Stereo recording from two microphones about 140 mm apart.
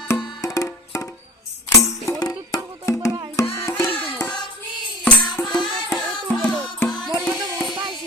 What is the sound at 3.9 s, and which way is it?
Music, 40° left (ahead or behind).